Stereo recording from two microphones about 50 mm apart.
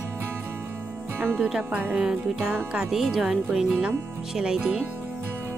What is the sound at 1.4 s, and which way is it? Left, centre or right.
Music, centre.